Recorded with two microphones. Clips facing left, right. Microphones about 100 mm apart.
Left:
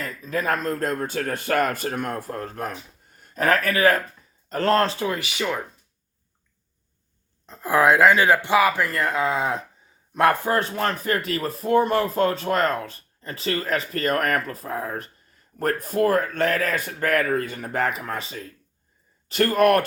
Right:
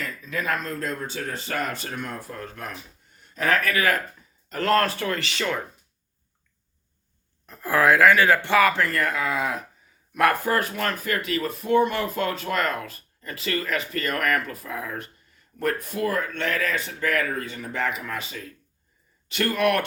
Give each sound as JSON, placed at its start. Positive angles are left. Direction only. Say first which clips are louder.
{"t": 0.0, "sound": "speech", "louder": "left 3 dB", "side_deg": 40}
{"t": 7.4, "sound": "speech", "louder": "left 2 dB", "side_deg": 20}